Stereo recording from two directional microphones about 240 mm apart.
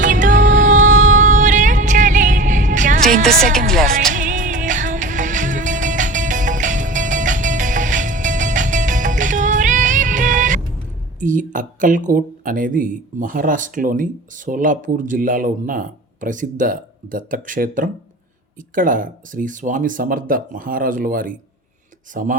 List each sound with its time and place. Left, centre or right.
0.0 s music: right
3.7 s music: centre
4.1 s music: right
11.2 s speech: right